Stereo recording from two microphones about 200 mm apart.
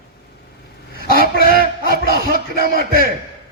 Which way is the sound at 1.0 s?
45° right (ahead or behind).